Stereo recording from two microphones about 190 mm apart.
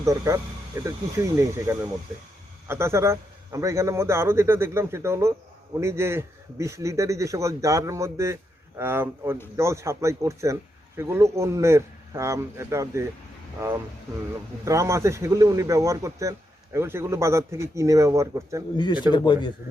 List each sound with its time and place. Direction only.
0.0 s speech: 15° right (ahead or behind)
18.8 s speech: 25° left (ahead or behind)